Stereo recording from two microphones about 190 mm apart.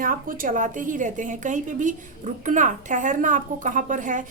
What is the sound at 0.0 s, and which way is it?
A woman's voice, 45° right (ahead or behind).